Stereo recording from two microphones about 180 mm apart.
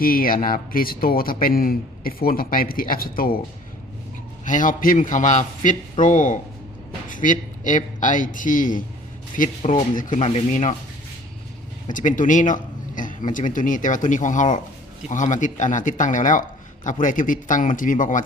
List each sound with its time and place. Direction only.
0.0 s speech: 50° left (ahead or behind)
4.4 s speech: 45° left (ahead or behind)
11.9 s speech: 45° left (ahead or behind)